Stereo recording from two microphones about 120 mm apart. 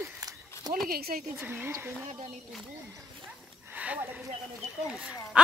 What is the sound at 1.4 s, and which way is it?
Speech, 15° right (ahead or behind).